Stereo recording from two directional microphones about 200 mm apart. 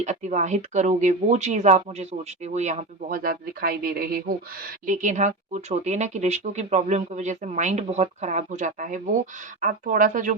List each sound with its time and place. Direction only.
0.0 s speech: 35° right (ahead or behind)